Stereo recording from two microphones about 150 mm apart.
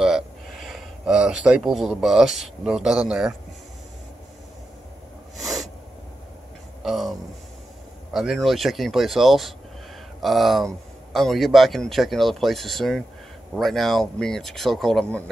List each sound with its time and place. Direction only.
0.7 s speech: 5° right (ahead or behind)
5.4 s snort: centre (ahead or behind)
6.8 s a sound: centre (ahead or behind)
8.1 s speech: centre (ahead or behind)